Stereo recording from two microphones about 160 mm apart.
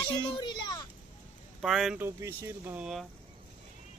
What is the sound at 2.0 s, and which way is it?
Speech, 15° right (ahead or behind).